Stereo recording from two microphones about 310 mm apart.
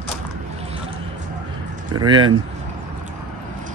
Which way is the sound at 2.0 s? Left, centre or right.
Centre.